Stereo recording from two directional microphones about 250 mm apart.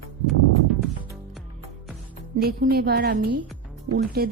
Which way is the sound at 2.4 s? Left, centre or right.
Right.